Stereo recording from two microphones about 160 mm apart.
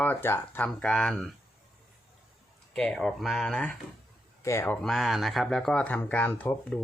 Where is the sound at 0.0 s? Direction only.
10° left (ahead or behind).